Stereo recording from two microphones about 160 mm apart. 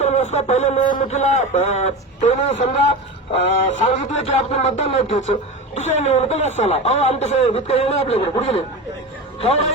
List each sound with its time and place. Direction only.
0.0 s music: 45° left (ahead or behind)
0.9 s a man's voice: 45° left (ahead or behind)